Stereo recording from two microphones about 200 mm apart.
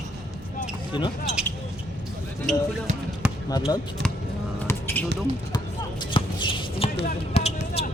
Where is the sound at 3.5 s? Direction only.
20° left (ahead or behind).